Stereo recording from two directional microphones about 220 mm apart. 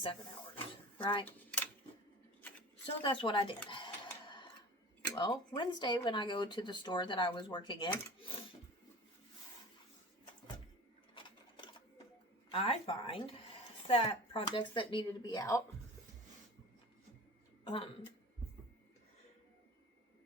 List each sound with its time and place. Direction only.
0.5 s a sound: 20° left (ahead or behind)
1.2 s a sound: 10° left (ahead or behind)
3.0 s speech: 20° left (ahead or behind)
3.7 s printer: 20° left (ahead or behind)
5.1 s speech: 20° left (ahead or behind)
12.5 s speech: 25° left (ahead or behind)